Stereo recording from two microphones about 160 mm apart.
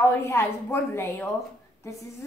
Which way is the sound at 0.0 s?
15° left (ahead or behind).